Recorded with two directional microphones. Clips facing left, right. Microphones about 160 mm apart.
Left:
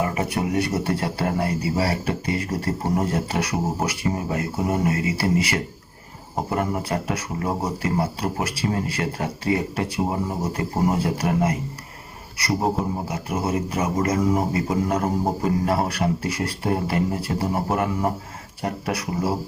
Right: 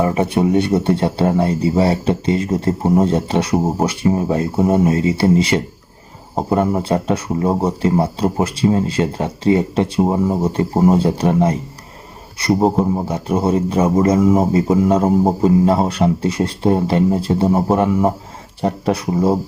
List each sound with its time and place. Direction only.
0.0 s a man's voice: 30° right (ahead or behind)